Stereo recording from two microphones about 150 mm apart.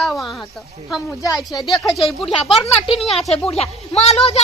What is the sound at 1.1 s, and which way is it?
Speech, 25° left (ahead or behind).